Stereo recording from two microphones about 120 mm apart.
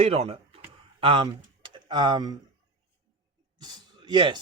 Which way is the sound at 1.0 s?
45° right (ahead or behind).